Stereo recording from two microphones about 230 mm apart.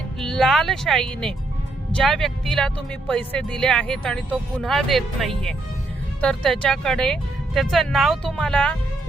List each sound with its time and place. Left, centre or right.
0.2 s speech: centre